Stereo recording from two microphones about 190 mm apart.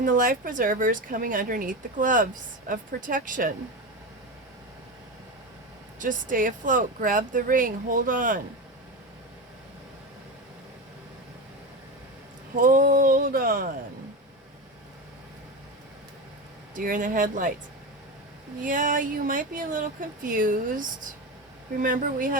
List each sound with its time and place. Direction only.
0.0 s speech: 45° right (ahead or behind)
6.0 s speech: 45° right (ahead or behind)
12.5 s speech: 45° right (ahead or behind)
16.7 s speech: 45° right (ahead or behind)
18.6 s speech: 45° right (ahead or behind)